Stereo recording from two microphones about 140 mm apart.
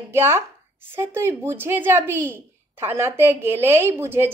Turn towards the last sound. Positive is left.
turn(degrees=-15)  # may be behind; listen again after turning